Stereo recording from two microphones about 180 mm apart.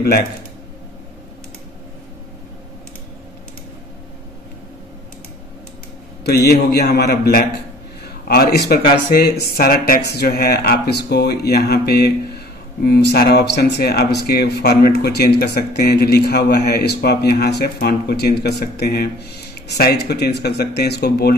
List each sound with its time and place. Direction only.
6.7 s speech: 60° left (ahead or behind)